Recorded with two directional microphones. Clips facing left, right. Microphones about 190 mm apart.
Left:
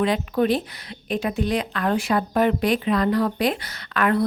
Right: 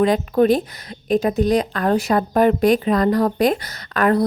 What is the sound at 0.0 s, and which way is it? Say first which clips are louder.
A woman's voice: right 5 dB; 45° right (ahead or behind).